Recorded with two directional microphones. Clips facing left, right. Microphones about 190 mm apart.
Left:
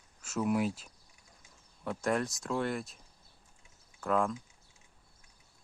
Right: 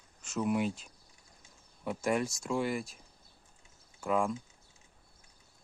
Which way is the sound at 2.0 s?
Centre (ahead or behind).